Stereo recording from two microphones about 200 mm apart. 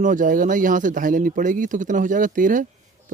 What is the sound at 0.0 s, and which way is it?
Speech, 40° right (ahead or behind).